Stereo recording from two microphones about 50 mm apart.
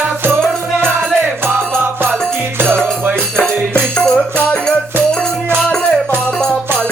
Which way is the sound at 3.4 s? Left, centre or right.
Left.